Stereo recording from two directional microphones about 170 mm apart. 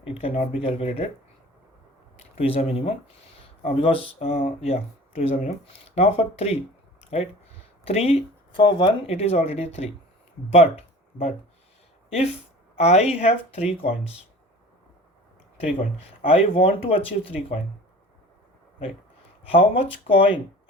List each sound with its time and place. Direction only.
0.0 s speech: 35° left (ahead or behind)
2.4 s speech: 35° left (ahead or behind)
7.0 s a sound: 40° left (ahead or behind)
7.9 s speech: 35° left (ahead or behind)
12.7 s speech: 40° left (ahead or behind)
16.2 s speech: 35° left (ahead or behind)
19.5 s speech: 35° left (ahead or behind)